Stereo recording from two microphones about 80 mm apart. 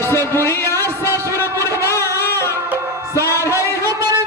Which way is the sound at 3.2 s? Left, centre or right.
Left.